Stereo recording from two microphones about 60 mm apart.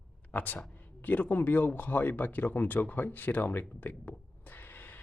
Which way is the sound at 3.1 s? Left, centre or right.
Left.